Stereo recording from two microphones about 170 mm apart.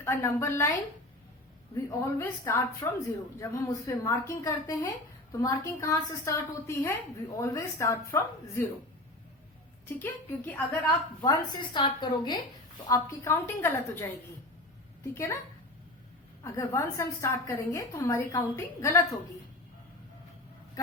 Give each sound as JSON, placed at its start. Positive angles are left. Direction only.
{"t": 0.0, "sound": "a woman's voice", "side_deg": 15}
{"t": 1.7, "sound": "a woman's voice", "side_deg": 15}
{"t": 10.0, "sound": "a woman's voice", "side_deg": 10}
{"t": 11.2, "sound": "a woman's voice", "side_deg": 25}
{"t": 15.1, "sound": "a woman's voice", "side_deg": 15}
{"t": 16.4, "sound": "a woman's voice", "side_deg": 15}